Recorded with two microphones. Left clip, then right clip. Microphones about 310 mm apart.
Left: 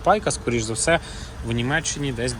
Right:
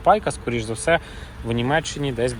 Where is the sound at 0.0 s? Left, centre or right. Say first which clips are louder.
Right 2 dB; centre.